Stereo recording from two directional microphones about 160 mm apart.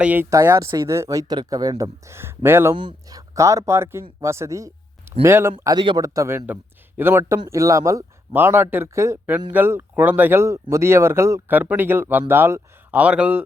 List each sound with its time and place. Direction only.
0.0 s a man's voice: 10° right (ahead or behind)
2.7 s speech: 25° right (ahead or behind)
4.2 s a sound: 20° right (ahead or behind)
5.2 s a man's voice: 15° right (ahead or behind)
5.7 s speech: 30° right (ahead or behind)
6.1 s a man's voice: 15° right (ahead or behind)